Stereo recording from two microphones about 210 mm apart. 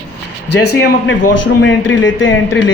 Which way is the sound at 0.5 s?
50° left (ahead or behind).